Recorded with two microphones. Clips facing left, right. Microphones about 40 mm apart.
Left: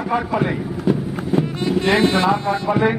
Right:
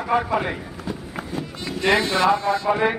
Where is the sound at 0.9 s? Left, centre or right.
Left.